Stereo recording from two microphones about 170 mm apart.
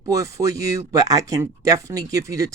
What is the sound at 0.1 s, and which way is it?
Speech, 20° right (ahead or behind).